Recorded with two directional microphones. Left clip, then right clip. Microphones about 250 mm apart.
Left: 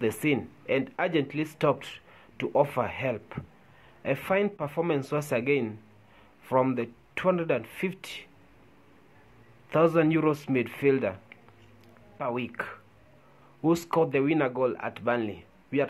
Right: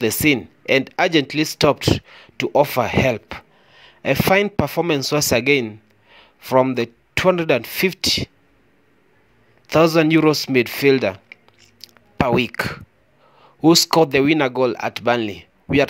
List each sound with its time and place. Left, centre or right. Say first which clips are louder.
0.0 s speech: right 9 dB; right
9.7 s speech: right 8 dB; right